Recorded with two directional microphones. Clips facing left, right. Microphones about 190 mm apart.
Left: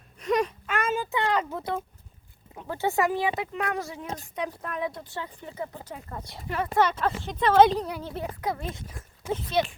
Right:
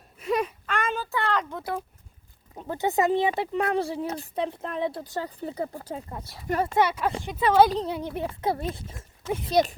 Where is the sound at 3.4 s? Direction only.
35° right (ahead or behind).